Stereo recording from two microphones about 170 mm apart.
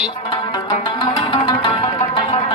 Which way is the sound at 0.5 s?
30° left (ahead or behind).